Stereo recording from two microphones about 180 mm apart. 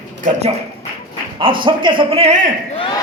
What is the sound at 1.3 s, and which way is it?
A man's voice, 30° right (ahead or behind).